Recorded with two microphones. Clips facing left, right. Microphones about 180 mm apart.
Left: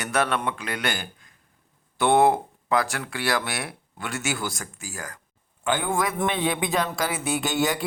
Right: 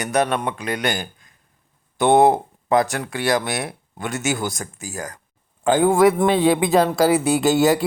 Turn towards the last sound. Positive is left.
turn(degrees=-35)  # may be behind; listen again after turning